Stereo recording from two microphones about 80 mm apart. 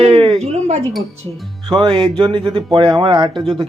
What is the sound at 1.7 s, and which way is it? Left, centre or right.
Speech, right.